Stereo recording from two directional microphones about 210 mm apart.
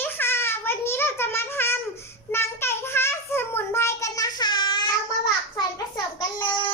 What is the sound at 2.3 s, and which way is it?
Child singing, 10° left (ahead or behind).